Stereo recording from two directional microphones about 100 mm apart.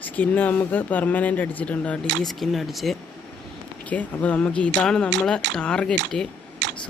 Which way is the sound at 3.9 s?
15° left (ahead or behind).